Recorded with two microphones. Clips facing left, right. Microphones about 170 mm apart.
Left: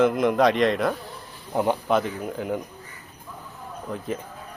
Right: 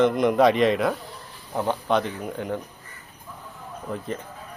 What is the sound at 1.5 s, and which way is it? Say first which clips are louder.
Speech: left 3 dB; 15° left (ahead or behind).